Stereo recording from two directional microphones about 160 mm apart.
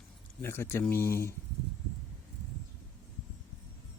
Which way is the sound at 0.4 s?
15° left (ahead or behind).